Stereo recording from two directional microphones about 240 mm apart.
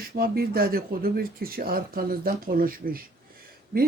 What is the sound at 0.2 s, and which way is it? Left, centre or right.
Speech, right.